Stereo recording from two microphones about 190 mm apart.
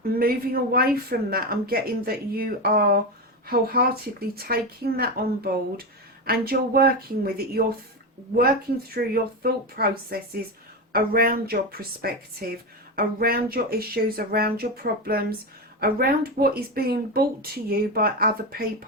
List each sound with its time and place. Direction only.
0.0 s speech: 50° right (ahead or behind)
9.0 s speech: 55° right (ahead or behind)